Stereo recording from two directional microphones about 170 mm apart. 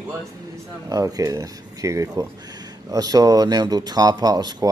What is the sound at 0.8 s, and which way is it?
Speech, 20° right (ahead or behind).